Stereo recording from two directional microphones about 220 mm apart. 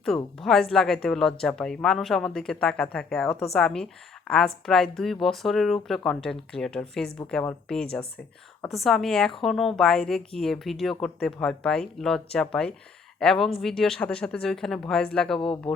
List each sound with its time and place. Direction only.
0.3 s a woman's voice: centre (ahead or behind)
15.4 s speech: 25° left (ahead or behind)